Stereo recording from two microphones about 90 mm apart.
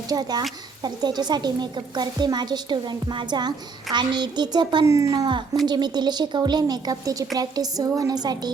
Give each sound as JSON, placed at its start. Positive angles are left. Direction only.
{"t": 0.1, "sound": "a woman's voice", "side_deg": -50}
{"t": 4.9, "sound": "a woman's voice", "side_deg": -35}